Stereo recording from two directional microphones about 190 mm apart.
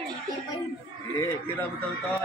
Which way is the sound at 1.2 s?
10° left (ahead or behind).